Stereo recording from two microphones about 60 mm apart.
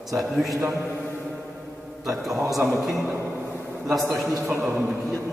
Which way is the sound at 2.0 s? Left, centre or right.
Centre.